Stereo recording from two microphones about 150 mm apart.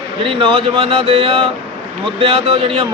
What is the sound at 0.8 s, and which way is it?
A man's voice, 40° right (ahead or behind).